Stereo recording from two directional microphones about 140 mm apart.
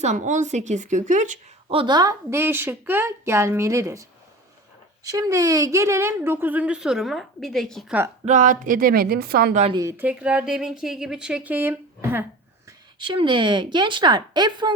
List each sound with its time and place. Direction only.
0.0 s a woman's voice: 60° right (ahead or behind)
1.7 s a woman's voice: 35° right (ahead or behind)
5.0 s a woman's voice: 25° right (ahead or behind); by 7.9 s centre (ahead or behind)
8.2 s speech: 60° right (ahead or behind); by 9.5 s 90° right
10.0 s a woman's voice: 10° right (ahead or behind)
13.0 s a woman's voice: 35° right (ahead or behind)